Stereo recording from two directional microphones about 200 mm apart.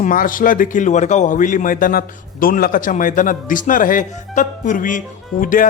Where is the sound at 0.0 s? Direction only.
45° left (ahead or behind).